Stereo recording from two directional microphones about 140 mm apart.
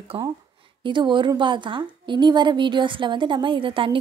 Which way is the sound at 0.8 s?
35° right (ahead or behind).